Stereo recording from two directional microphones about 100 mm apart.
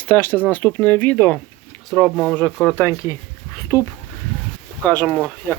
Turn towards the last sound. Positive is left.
turn(degrees=10)  # may be behind; listen again after turning